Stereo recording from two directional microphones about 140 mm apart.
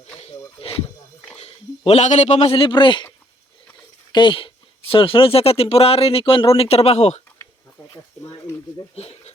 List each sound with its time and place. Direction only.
0.2 s a sound: 45° left (ahead or behind)
1.4 s a man's voice: 45° left (ahead or behind)
4.1 s a woman's voice: 35° left (ahead or behind); by 7.2 s 50° left (ahead or behind)
9.0 s speech: 50° left (ahead or behind)